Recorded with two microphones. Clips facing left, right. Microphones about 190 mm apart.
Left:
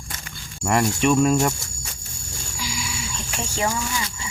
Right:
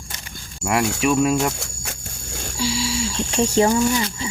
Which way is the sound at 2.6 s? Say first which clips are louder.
Right 9 dB; 30° right (ahead or behind).